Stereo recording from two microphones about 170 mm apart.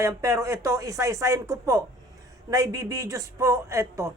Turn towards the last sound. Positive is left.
turn(degrees=-15)  # may be behind; listen again after turning